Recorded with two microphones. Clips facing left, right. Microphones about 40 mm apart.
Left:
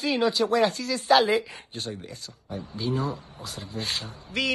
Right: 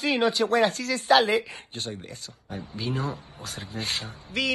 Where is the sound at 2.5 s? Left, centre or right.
Right.